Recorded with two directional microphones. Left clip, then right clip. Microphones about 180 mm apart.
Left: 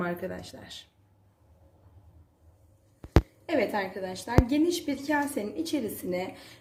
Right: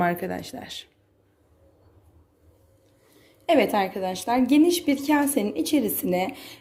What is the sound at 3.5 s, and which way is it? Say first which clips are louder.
A woman's voice: right 8 dB; 45° right (ahead or behind).